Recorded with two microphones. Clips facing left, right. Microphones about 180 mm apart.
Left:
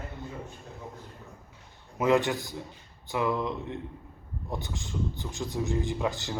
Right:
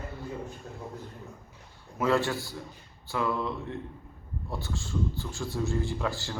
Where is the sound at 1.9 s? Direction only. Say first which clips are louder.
Left 2 dB; 20° left (ahead or behind).